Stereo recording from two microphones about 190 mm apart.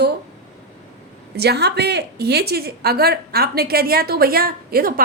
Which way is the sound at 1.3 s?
60° right (ahead or behind).